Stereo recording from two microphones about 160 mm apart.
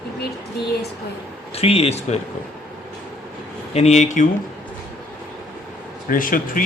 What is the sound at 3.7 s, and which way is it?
Speech, 40° left (ahead or behind).